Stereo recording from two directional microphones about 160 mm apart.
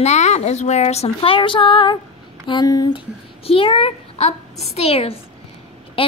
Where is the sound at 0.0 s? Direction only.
45° left (ahead or behind).